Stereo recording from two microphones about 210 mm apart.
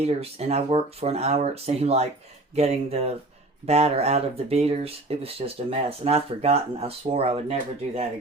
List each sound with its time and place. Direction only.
0.0 s speech: 30° right (ahead or behind)